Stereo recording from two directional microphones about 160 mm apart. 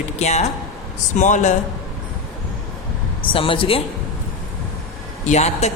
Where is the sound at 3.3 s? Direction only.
35° left (ahead or behind).